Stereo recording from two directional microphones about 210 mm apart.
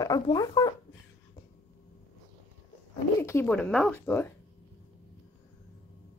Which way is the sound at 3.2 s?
10° left (ahead or behind).